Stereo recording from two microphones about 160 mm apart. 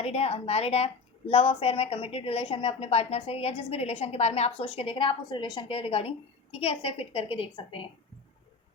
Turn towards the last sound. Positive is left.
turn(degrees=35)  # may be behind; listen again after turning